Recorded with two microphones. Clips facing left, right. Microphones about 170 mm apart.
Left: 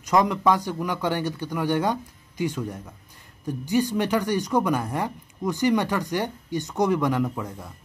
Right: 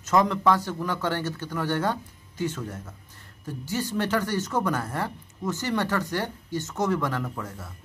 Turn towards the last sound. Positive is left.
turn(degrees=15)  # may be behind; listen again after turning